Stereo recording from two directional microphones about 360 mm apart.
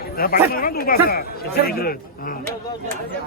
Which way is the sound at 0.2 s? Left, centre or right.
Left.